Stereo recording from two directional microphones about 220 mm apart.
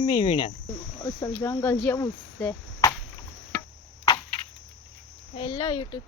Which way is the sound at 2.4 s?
5° left (ahead or behind).